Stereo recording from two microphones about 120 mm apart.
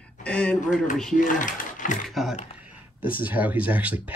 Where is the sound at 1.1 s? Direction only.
90° left.